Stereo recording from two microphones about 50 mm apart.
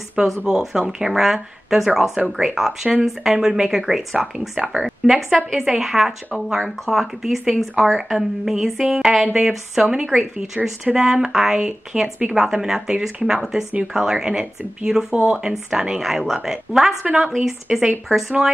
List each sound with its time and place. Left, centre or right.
0.2 s speech: centre
0.5 s speech: centre
14.4 s speech: right